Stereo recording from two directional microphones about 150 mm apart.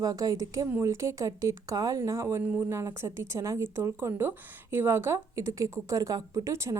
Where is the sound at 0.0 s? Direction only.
25° right (ahead or behind).